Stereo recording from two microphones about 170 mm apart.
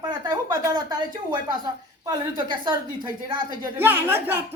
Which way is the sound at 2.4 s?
25° right (ahead or behind).